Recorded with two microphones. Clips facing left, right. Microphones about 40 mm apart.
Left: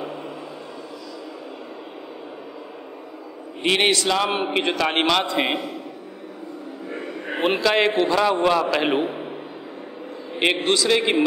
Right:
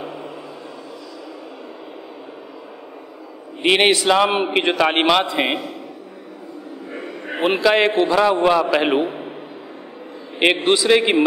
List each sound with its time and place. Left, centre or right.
0.0 s a sound: centre
3.6 s a man's voice: right
6.9 s a man's voice: centre
10.4 s a man's voice: right